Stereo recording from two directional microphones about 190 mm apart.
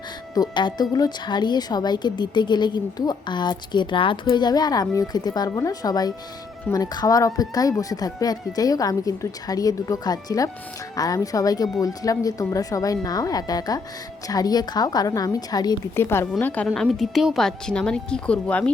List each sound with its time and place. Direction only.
0.3 s a woman's voice: 25° left (ahead or behind); by 18.7 s 5° left (ahead or behind)